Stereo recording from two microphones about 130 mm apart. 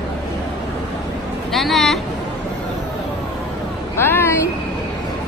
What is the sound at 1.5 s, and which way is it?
Speech, centre (ahead or behind).